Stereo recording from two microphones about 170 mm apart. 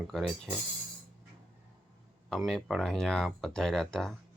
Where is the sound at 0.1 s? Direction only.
Centre (ahead or behind).